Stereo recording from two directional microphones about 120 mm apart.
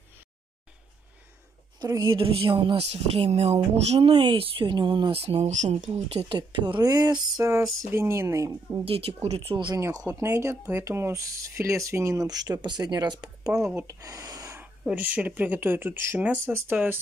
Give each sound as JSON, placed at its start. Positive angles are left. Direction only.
{"t": 1.8, "sound": "a woman's voice", "side_deg": -25}
{"t": 2.0, "sound": "speech", "side_deg": -45}
{"t": 2.8, "sound": "speech", "side_deg": -60}
{"t": 4.1, "sound": "speech", "side_deg": -45}
{"t": 5.2, "sound": "speech", "side_deg": -65}
{"t": 5.8, "sound": "speech", "side_deg": -60}
{"t": 8.8, "sound": "speech", "side_deg": -55}
{"t": 10.0, "sound": "speech", "side_deg": -25}
{"t": 14.6, "sound": "speech", "side_deg": -15}